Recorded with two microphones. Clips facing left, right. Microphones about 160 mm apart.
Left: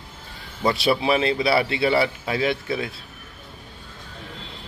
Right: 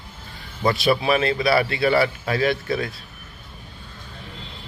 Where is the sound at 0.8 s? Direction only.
25° left (ahead or behind).